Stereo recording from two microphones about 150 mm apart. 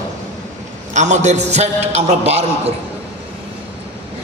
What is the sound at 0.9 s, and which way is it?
A man's voice, 50° right (ahead or behind).